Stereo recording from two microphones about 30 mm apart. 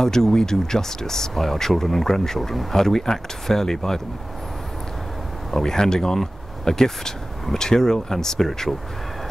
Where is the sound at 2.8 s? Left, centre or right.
Centre.